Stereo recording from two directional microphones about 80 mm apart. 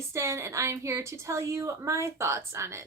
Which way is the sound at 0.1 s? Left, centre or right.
Right.